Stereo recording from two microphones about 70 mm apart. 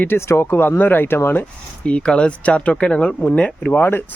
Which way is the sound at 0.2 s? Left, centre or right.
Left.